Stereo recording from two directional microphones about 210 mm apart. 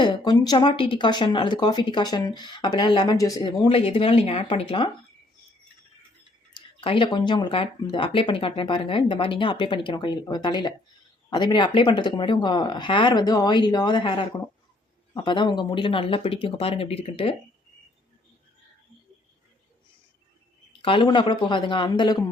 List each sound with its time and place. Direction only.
0.0 s speech: 20° left (ahead or behind)
6.5 s speech: 25° left (ahead or behind)
20.8 s speech: 25° left (ahead or behind)